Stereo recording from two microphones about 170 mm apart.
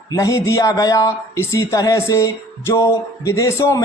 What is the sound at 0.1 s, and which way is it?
Speech, 20° left (ahead or behind).